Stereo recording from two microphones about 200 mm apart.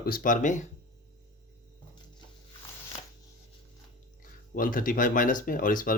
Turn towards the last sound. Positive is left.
turn(degrees=45)  # may be behind; listen again after turning